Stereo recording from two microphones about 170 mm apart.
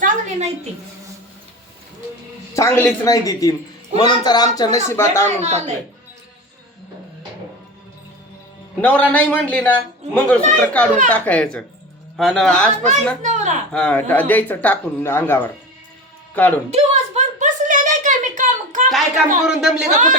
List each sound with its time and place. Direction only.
0.0 s a sound: 45° right (ahead or behind)
2.6 s speech: 15° left (ahead or behind)
5.4 s speech: 40° right (ahead or behind)
8.8 s a man's voice: 10° left (ahead or behind)
13.2 s speech: 45° right (ahead or behind)
13.7 s speech: 5° left (ahead or behind)
16.7 s a sound: 45° right (ahead or behind)
18.9 s a man's voice: centre (ahead or behind)
19.9 s speech: 50° right (ahead or behind)